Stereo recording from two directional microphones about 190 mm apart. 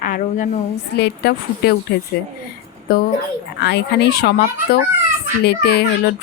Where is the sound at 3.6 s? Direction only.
60° left (ahead or behind).